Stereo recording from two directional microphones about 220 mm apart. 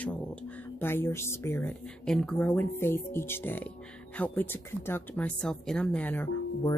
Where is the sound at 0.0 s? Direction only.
5° left (ahead or behind).